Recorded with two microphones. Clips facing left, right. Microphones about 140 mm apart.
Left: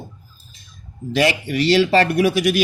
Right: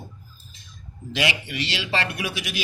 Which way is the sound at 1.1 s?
45° left (ahead or behind).